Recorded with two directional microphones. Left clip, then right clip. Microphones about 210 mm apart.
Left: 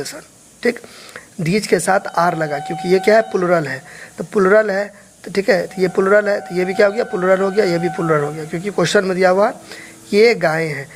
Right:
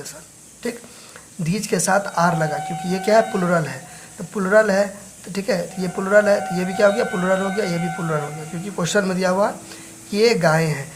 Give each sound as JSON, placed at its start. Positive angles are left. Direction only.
{"t": 1.5, "sound": "a woman's voice", "side_deg": 25}